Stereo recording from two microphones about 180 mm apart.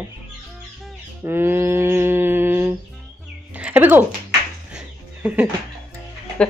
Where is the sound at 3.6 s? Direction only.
10° right (ahead or behind).